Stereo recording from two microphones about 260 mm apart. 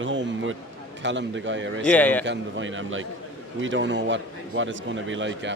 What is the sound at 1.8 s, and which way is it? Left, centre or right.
Speech, centre.